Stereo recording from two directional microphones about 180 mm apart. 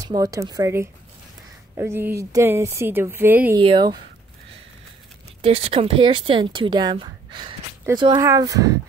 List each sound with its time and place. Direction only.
0.0 s speech: 20° right (ahead or behind)
3.5 s speech: 25° right (ahead or behind)
5.4 s speech: 35° right (ahead or behind)